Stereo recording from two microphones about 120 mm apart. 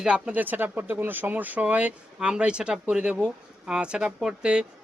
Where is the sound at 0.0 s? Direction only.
10° right (ahead or behind).